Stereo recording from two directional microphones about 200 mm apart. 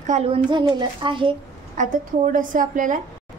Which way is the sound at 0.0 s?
35° right (ahead or behind).